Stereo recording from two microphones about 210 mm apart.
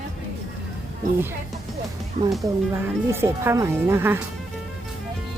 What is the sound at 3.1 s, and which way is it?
Speech, 10° right (ahead or behind).